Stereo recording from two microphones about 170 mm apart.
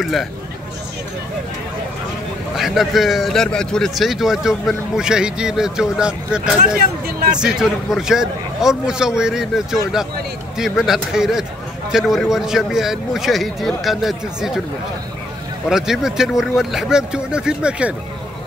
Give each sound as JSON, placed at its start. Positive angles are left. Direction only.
{"t": 0.0, "sound": "a man's voice", "side_deg": 0}
{"t": 2.5, "sound": "a man's voice", "side_deg": 0}
{"t": 7.1, "sound": "speech", "side_deg": -60}
{"t": 7.3, "sound": "a man's voice", "side_deg": -5}
{"t": 15.7, "sound": "a man's voice", "side_deg": -5}